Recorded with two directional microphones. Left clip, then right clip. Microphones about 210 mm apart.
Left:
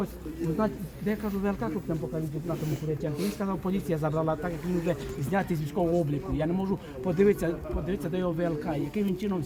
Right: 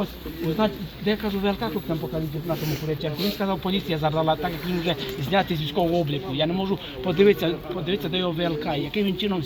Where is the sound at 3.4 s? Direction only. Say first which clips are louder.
Right 6 dB; 10° right (ahead or behind).